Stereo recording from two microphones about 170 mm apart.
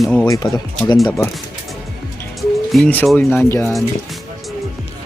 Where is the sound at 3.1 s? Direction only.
10° left (ahead or behind).